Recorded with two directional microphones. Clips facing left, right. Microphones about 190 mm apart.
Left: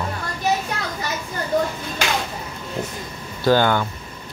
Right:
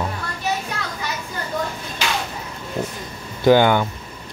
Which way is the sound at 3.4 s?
15° right (ahead or behind).